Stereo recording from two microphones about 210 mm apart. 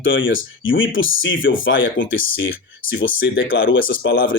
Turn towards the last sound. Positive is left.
turn(degrees=60)  # may be behind; listen again after turning